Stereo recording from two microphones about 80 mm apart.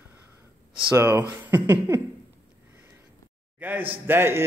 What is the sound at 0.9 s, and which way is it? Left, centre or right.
Speech, right.